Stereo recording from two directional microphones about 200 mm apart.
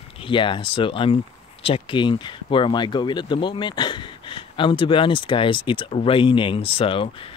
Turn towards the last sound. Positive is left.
turn(degrees=25)  # may be behind; listen again after turning